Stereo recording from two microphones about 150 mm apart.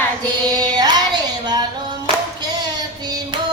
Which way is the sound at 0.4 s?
25° right (ahead or behind).